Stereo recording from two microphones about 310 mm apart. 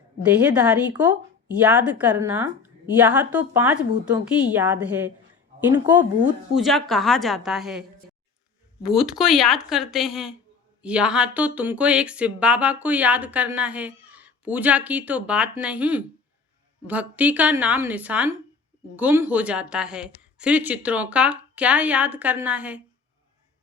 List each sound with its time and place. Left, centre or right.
0.4 s speech: centre